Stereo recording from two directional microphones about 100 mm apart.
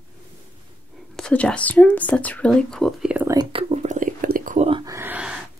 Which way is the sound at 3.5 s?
60° right (ahead or behind).